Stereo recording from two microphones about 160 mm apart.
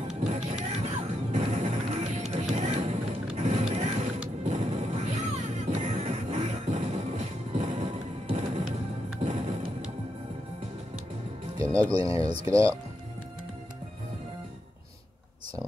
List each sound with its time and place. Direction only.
0.2 s music: 45° right (ahead or behind)
3.3 s mechanisms: 45° right (ahead or behind)
4.5 s music: 45° right (ahead or behind)
12.0 s speech: 20° right (ahead or behind)